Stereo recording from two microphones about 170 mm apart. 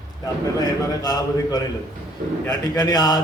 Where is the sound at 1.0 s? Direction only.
20° left (ahead or behind).